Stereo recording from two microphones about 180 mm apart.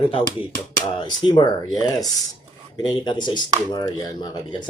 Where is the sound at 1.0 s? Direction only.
25° left (ahead or behind).